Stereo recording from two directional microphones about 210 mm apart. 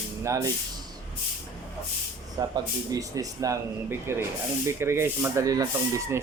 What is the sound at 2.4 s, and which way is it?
Speech, 20° right (ahead or behind).